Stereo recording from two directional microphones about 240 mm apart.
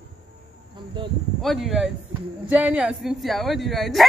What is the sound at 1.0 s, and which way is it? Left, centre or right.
Speech, centre.